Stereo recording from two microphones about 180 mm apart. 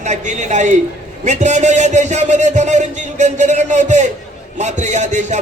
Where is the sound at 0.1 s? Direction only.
40° right (ahead or behind).